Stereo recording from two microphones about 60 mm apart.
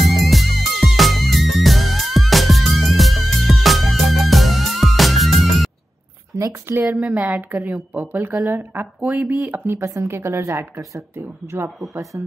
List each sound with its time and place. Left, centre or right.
0.0 s music: centre
6.3 s a sound: right
6.9 s a woman's voice: right
9.1 s a woman's voice: right
9.5 s a woman's voice: right
10.8 s speech: right
11.1 s speech: right
12.0 s speech: right